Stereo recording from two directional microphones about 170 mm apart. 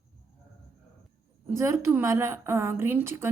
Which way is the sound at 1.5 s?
15° right (ahead or behind).